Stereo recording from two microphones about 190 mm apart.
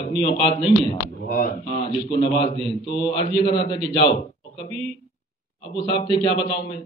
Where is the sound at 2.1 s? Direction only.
25° left (ahead or behind).